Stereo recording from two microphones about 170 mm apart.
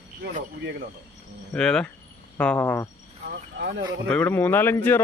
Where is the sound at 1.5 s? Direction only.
5° left (ahead or behind).